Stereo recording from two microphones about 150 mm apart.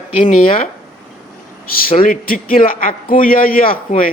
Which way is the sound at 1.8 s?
70° left (ahead or behind).